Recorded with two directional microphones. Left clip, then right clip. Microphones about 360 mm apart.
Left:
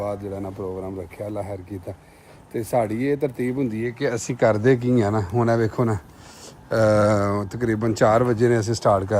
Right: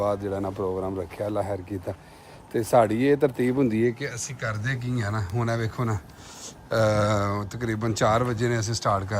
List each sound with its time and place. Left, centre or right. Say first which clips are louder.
0.0 s speech: right 2 dB; centre
3.8 s speech: left 1 dB; right
4.1 s speech: left 12 dB; centre